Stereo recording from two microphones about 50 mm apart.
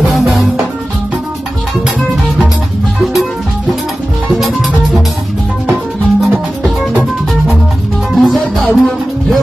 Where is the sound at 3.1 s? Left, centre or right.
Centre.